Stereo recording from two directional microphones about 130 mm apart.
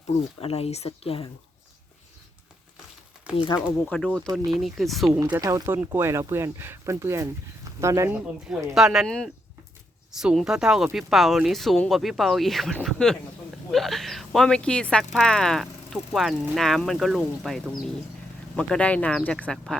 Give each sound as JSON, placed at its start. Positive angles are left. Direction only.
{"t": 0.3, "sound": "speech", "side_deg": 50}
{"t": 3.3, "sound": "speech", "side_deg": -10}
{"t": 3.8, "sound": "speech", "side_deg": 5}
{"t": 5.4, "sound": "speech", "side_deg": -25}
{"t": 8.1, "sound": "speech", "side_deg": -10}